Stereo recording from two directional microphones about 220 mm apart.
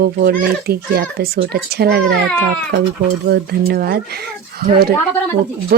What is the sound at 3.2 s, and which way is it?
Speech, 45° right (ahead or behind).